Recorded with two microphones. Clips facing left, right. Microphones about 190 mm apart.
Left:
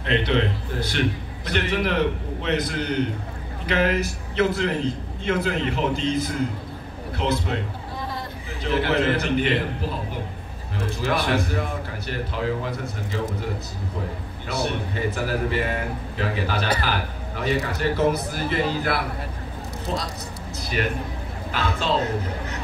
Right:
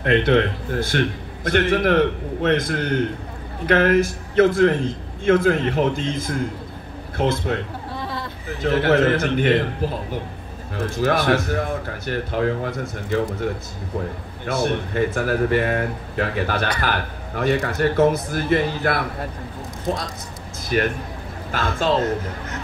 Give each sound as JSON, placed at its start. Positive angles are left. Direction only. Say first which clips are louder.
{"t": 0.0, "sound": "a man's voice", "louder": "right 5 dB", "side_deg": -55}
{"t": 8.6, "sound": "a man's voice", "louder": "right 5 dB", "side_deg": -50}
{"t": 11.0, "sound": "a man's voice", "louder": "right 5 dB", "side_deg": -45}
{"t": 14.4, "sound": "a man's voice", "louder": "right 5 dB", "side_deg": -50}
{"t": 20.7, "sound": "a man's voice", "louder": "right 5 dB", "side_deg": -50}